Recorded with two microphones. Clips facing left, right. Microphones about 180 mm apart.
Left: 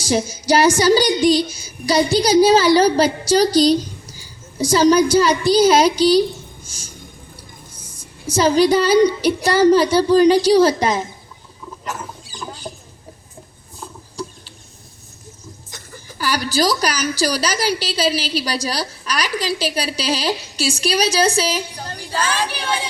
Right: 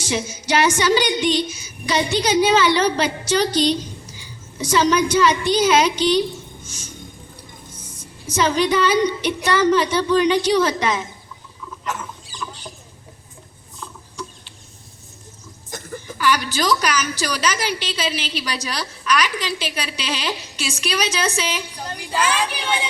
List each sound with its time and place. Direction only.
0.0 s speech: 35° left (ahead or behind)
6.7 s music: 35° left (ahead or behind)
8.3 s speech: 35° left (ahead or behind)
11.9 s rodents: 35° left (ahead or behind)
13.7 s chicken: 35° left (ahead or behind)
15.7 s a sound: 50° right (ahead or behind)
16.1 s speech: 35° left (ahead or behind)